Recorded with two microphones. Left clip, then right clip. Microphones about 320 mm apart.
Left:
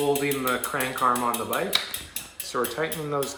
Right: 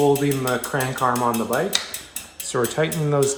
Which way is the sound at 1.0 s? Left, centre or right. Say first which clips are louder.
Right 1 dB; right.